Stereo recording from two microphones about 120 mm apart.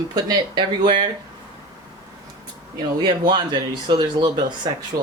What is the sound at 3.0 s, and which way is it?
Speech, 40° right (ahead or behind).